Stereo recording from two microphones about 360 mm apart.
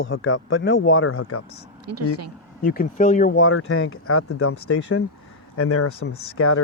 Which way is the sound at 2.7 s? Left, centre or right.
Left.